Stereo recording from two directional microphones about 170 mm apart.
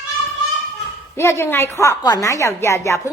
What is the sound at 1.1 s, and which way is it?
A woman's voice, 15° left (ahead or behind).